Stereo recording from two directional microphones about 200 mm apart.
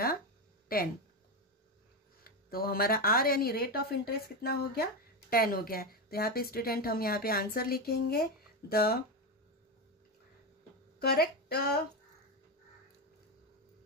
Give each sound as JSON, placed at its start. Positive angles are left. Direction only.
{"t": 0.7, "sound": "a woman's voice", "side_deg": 50}
{"t": 2.2, "sound": "a woman's voice", "side_deg": 50}
{"t": 11.0, "sound": "speech", "side_deg": 50}